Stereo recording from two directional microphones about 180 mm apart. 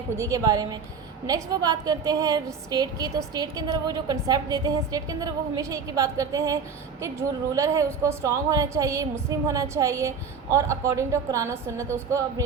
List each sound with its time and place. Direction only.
0.2 s a woman's voice: 20° right (ahead or behind)